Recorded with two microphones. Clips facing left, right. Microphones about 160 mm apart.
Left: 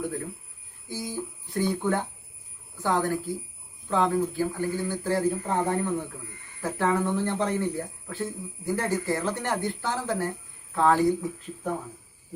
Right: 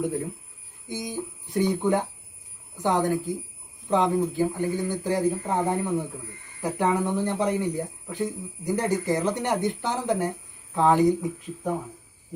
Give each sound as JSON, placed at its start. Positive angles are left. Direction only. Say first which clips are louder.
{"t": 0.9, "sound": "speech", "louder": "right 1 dB", "side_deg": -20}